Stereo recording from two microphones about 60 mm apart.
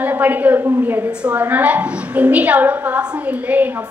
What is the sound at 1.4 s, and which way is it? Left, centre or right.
A woman's voice, right.